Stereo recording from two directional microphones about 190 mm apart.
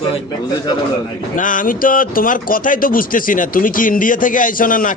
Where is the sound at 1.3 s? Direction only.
45° left (ahead or behind).